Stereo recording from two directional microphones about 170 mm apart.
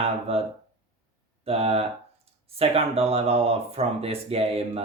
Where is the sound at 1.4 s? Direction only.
35° right (ahead or behind).